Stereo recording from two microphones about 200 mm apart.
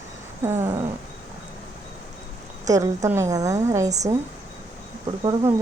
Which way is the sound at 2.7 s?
15° right (ahead or behind).